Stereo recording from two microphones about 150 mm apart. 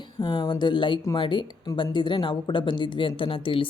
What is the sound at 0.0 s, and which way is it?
A woman's voice, 30° left (ahead or behind).